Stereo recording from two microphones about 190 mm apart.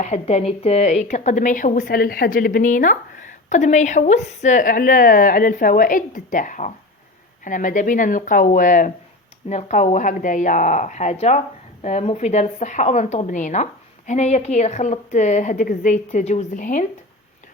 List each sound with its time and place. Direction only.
0.0 s a woman's voice: 35° left (ahead or behind)